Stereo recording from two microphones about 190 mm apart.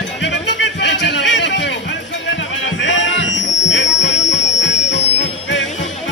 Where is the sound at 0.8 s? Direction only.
65° left (ahead or behind).